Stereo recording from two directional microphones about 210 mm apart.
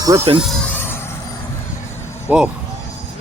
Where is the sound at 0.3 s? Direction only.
Centre (ahead or behind).